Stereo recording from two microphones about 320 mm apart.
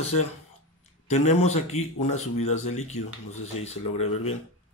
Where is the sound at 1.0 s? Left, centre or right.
Left.